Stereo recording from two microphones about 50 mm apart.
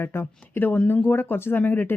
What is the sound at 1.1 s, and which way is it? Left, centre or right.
Speech, left.